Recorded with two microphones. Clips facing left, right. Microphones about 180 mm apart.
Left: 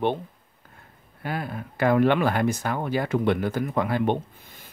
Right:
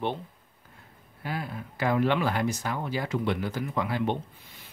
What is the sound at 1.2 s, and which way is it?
Speech, 55° left (ahead or behind).